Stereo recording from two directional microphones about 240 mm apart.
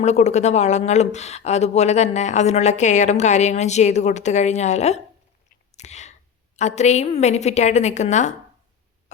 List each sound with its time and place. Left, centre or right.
0.0 s speech: left
5.7 s a sound: left
6.6 s speech: left